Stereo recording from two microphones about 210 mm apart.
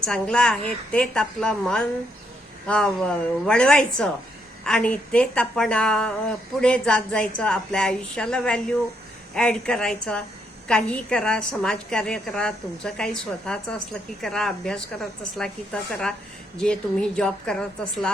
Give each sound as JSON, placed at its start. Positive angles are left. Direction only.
{"t": 0.0, "sound": "a woman's voice", "side_deg": 5}